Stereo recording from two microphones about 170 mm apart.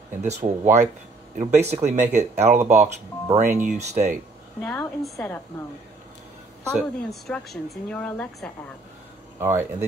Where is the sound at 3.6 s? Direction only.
40° right (ahead or behind).